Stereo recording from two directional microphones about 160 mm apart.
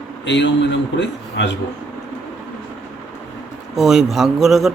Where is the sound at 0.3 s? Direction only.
90° left.